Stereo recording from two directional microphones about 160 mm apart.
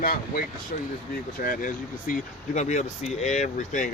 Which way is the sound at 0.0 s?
70° left (ahead or behind).